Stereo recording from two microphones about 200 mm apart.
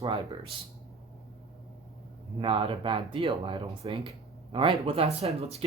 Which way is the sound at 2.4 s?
25° right (ahead or behind).